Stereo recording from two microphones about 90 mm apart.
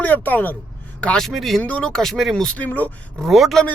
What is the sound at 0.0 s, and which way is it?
Speech, 20° left (ahead or behind).